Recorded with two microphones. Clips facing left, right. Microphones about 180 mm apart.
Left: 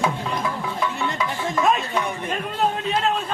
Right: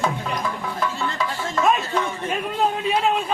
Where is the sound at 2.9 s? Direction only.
10° right (ahead or behind).